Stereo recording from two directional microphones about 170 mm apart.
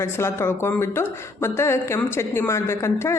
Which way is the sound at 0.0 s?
15° left (ahead or behind).